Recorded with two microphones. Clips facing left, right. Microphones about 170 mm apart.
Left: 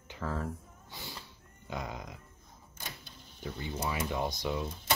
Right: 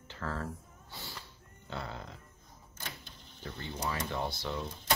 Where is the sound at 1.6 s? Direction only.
15° left (ahead or behind).